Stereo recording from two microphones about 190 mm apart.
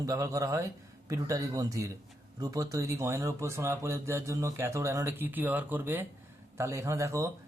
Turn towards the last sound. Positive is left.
turn(degrees=-15)  # may be behind; listen again after turning